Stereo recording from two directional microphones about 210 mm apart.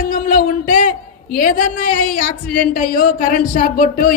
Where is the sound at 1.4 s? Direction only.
40° left (ahead or behind).